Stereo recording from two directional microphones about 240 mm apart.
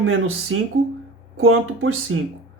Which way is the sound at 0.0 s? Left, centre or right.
Right.